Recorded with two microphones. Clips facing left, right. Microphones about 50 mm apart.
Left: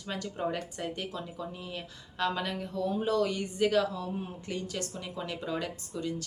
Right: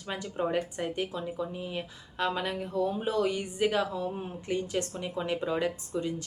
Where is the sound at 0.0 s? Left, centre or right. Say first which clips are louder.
Right 2 dB; centre.